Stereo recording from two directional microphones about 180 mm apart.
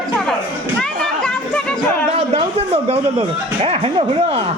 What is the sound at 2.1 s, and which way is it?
Music, 35° right (ahead or behind).